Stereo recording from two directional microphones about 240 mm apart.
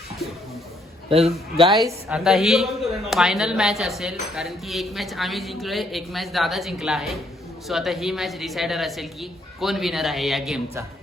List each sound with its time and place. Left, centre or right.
1.1 s a man's voice: right
1.9 s speech: centre